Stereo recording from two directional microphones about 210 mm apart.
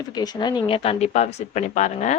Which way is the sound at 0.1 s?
20° left (ahead or behind).